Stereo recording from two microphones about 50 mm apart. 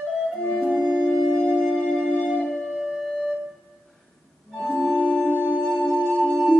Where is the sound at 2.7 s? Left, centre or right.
Centre.